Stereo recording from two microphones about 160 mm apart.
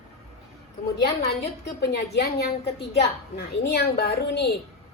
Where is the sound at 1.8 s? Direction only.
85° left.